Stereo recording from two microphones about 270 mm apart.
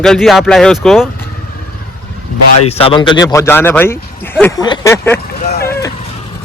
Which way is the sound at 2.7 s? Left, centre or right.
Left.